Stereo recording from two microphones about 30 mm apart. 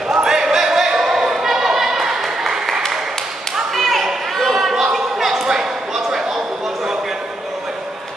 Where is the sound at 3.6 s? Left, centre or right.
Centre.